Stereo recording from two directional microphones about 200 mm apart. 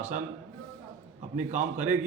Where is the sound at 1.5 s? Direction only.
40° right (ahead or behind).